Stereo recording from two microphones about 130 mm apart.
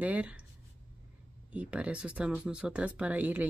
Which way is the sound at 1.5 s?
10° right (ahead or behind).